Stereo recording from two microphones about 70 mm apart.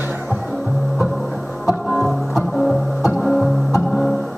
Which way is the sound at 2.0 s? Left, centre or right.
Centre.